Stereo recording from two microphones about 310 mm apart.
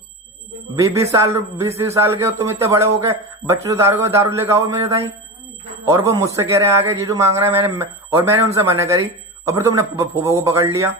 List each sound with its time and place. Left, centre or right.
0.8 s a man's voice: centre